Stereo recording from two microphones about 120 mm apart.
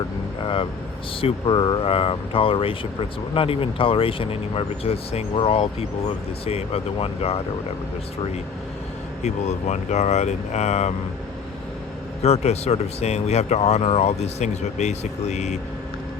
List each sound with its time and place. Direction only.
0.4 s vehicle: 50° left (ahead or behind)
1.2 s speech: 40° left (ahead or behind)
9.2 s speech: 70° left (ahead or behind)
12.2 s speech: 60° left (ahead or behind)